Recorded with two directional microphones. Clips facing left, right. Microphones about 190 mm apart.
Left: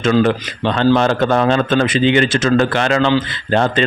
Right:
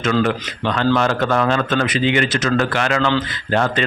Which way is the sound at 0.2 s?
30° left (ahead or behind).